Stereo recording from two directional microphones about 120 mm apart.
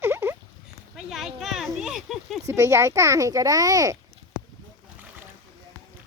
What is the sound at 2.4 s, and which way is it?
A child's voice, 25° right (ahead or behind).